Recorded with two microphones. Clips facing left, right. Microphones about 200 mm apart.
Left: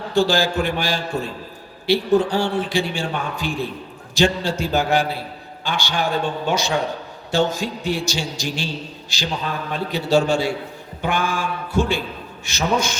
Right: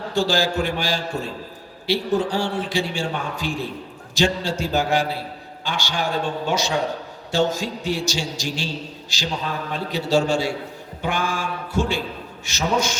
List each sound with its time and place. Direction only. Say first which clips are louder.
0.1 s a man's voice: left 3 dB; 55° left (ahead or behind)